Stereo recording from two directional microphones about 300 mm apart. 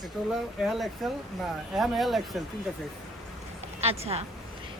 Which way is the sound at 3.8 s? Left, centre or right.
Centre.